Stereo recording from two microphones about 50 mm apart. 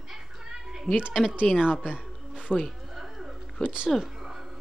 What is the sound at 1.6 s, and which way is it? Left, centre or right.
Speech, centre.